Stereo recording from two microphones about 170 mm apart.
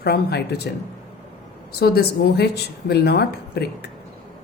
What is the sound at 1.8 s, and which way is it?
Speech, 70° left (ahead or behind).